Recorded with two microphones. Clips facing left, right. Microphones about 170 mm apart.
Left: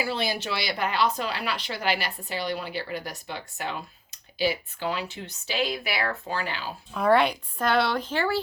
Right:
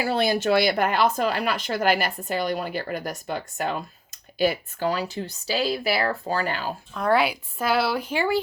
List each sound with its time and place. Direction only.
0.0 s speech: 50° right (ahead or behind)
6.9 s speech: centre (ahead or behind); by 8.4 s 15° right (ahead or behind)